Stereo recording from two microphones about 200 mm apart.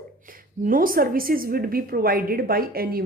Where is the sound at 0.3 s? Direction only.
45° right (ahead or behind).